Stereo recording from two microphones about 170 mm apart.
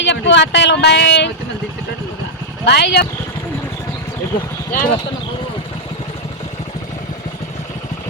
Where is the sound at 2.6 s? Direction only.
75° left (ahead or behind).